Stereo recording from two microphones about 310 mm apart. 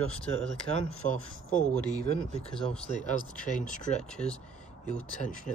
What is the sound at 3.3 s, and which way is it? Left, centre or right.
Speech, left.